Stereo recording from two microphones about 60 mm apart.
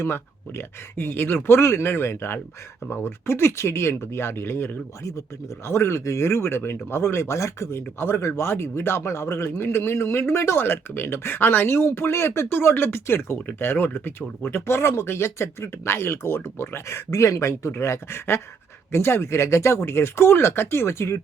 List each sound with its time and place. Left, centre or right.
0.0 s speech: left